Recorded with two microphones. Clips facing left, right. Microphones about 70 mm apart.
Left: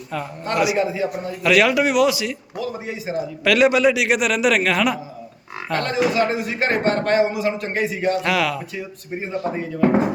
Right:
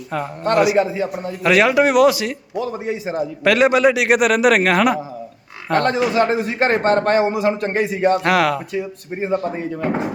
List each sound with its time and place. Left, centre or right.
0.1 s a man's voice: right